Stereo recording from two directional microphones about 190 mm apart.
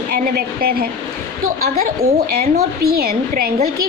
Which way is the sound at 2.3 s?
55° right (ahead or behind).